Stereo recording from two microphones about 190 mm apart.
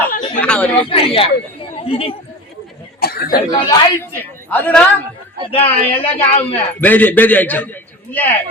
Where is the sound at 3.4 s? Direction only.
20° left (ahead or behind).